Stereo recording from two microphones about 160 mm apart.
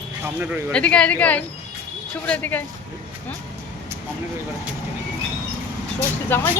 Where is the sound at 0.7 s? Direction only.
5° left (ahead or behind).